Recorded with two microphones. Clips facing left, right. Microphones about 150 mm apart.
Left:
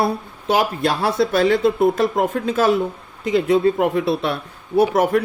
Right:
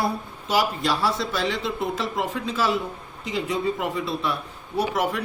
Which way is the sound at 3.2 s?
65° left (ahead or behind).